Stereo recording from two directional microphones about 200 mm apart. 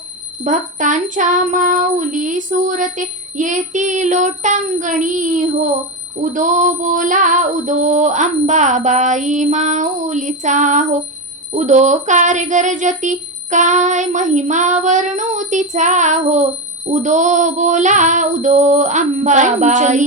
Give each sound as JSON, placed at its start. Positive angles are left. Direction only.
{"t": 0.4, "sound": "speech", "side_deg": -40}